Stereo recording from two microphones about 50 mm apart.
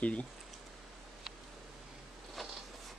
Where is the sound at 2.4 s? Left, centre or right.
Centre.